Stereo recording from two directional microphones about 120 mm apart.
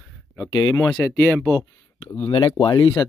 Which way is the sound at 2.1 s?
45° left (ahead or behind).